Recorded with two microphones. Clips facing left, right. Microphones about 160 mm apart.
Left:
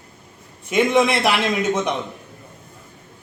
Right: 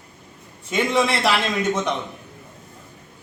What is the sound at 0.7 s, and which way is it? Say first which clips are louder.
Speech: left 4 dB; 15° left (ahead or behind).